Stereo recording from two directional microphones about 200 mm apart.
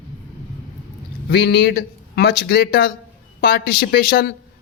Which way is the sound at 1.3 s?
55° left (ahead or behind).